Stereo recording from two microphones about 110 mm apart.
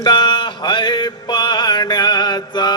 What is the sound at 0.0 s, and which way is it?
Mantra, 45° left (ahead or behind).